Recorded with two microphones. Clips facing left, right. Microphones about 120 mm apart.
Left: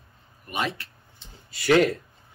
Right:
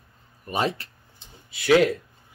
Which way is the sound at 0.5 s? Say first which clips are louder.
Right 4 dB; 35° right (ahead or behind).